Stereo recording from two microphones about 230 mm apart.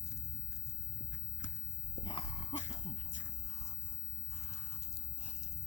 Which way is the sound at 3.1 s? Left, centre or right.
Left.